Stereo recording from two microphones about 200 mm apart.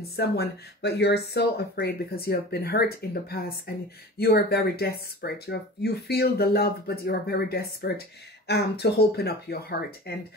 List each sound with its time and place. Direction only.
0.1 s speech: 55° left (ahead or behind)